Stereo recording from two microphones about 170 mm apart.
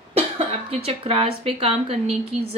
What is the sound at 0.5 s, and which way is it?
Speech, 35° right (ahead or behind).